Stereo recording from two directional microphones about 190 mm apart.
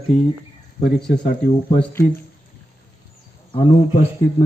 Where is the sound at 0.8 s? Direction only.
5° left (ahead or behind).